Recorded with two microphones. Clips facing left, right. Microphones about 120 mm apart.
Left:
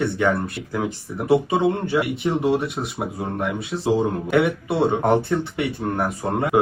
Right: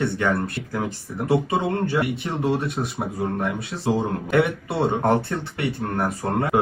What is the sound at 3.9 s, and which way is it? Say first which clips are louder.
Speech: left 2 dB; 15° left (ahead or behind).